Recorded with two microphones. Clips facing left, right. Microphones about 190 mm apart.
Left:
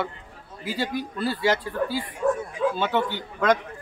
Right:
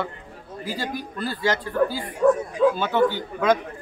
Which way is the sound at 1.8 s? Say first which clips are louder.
Right 5 dB; 70° right (ahead or behind).